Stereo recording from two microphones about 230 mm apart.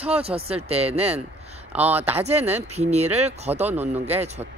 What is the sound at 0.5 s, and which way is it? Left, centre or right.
Speech, right.